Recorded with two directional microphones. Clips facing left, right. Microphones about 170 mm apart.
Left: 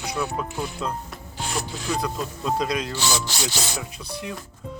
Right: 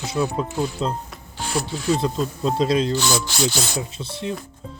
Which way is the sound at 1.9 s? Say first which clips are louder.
Right 5 dB; 25° right (ahead or behind).